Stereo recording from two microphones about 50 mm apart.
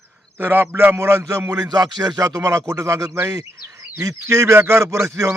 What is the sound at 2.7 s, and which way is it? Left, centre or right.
Speech, right.